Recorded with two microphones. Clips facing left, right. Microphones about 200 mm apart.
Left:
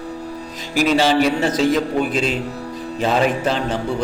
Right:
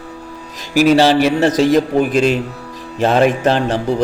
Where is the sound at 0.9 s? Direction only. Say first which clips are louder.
Right 4 dB; 70° right (ahead or behind).